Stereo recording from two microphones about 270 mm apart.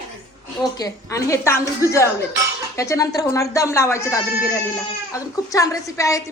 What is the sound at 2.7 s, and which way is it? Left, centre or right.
A woman's voice, centre.